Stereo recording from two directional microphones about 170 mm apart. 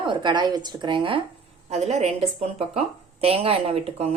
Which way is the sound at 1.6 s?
40° right (ahead or behind).